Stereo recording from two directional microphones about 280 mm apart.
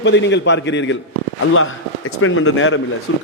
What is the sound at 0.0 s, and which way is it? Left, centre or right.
A man's voice, left.